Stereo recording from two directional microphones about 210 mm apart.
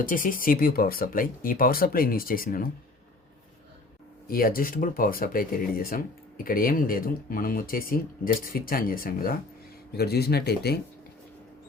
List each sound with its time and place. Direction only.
0.0 s speech: 40° left (ahead or behind)
4.3 s speech: 45° left (ahead or behind)